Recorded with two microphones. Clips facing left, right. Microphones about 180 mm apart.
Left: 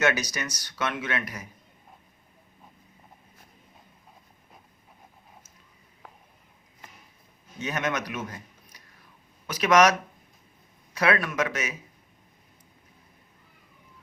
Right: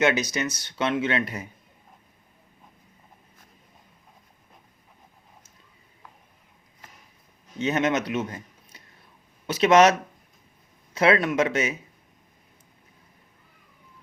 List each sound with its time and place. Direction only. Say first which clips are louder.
0.0 s speech: right 3 dB; 20° right (ahead or behind)
7.6 s a man's voice: right 6 dB; 25° right (ahead or behind)
10.9 s speech: right 4 dB; 25° right (ahead or behind)